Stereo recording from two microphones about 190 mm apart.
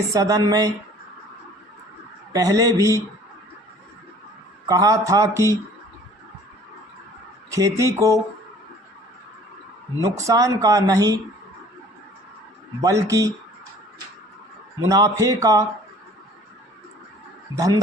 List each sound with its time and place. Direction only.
0.1 s speech: 20° right (ahead or behind)
2.3 s speech: 20° right (ahead or behind)
4.7 s speech: 15° right (ahead or behind)
7.5 s speech: 15° right (ahead or behind)
10.0 s speech: 15° right (ahead or behind)
12.8 s speech: 15° right (ahead or behind)
14.8 s speech: 20° right (ahead or behind)